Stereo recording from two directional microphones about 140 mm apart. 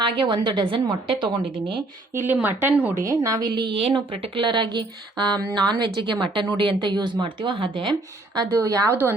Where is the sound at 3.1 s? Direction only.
25° right (ahead or behind).